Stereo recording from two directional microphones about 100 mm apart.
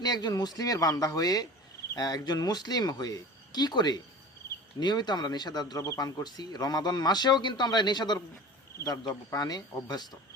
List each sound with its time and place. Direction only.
0.0 s speech: 45° left (ahead or behind)